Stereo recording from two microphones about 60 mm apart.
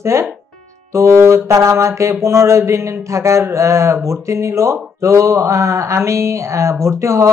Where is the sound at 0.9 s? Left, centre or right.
Right.